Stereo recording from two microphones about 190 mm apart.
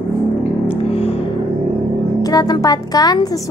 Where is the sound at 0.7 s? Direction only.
30° left (ahead or behind).